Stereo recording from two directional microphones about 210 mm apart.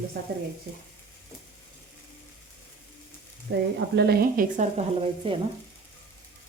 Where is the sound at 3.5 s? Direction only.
55° right (ahead or behind).